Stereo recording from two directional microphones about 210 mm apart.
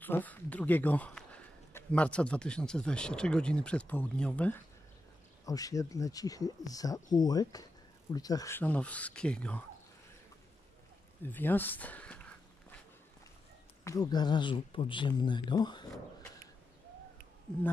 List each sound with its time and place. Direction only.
0.0 s speech: 10° left (ahead or behind)
5.4 s speech: 15° left (ahead or behind)
11.2 s speech: 10° left (ahead or behind)
13.8 s speech: 20° left (ahead or behind)